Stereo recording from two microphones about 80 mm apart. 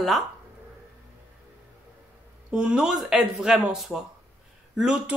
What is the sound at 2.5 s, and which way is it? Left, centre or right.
A woman's voice, centre.